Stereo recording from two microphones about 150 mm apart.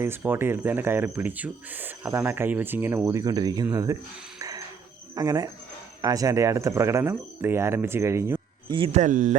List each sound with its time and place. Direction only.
0.0 s speech: 15° right (ahead or behind)
4.4 s a sound: 25° right (ahead or behind)
5.1 s speech: 25° right (ahead or behind)
8.9 s speech: 55° right (ahead or behind)